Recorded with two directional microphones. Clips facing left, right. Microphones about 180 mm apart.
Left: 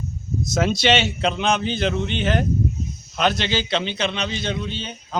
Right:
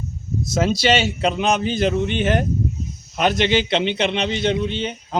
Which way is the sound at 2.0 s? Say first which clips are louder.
Right 3 dB; 50° right (ahead or behind).